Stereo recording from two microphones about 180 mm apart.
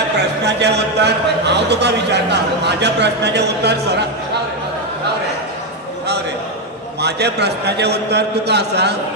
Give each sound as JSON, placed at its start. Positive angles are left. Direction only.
{"t": 0.5, "sound": "speech", "side_deg": -70}
{"t": 7.0, "sound": "speech", "side_deg": -65}